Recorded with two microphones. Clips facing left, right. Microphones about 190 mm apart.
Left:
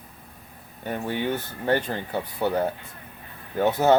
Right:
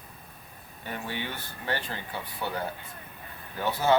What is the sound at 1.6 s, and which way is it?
Speech, 50° left (ahead or behind).